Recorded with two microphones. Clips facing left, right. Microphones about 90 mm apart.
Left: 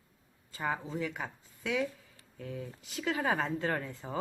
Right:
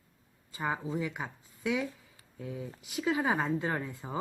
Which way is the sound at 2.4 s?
20° right (ahead or behind).